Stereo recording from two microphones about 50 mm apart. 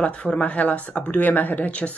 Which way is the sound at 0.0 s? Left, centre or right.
Left.